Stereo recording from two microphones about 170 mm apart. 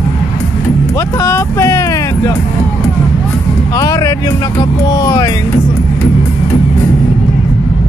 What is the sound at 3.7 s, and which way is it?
Speech, 20° left (ahead or behind).